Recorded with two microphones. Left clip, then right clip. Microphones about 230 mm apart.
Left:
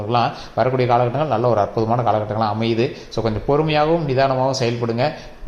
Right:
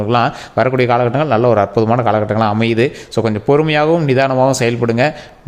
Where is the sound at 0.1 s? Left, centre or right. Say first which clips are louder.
Right 3 dB; right.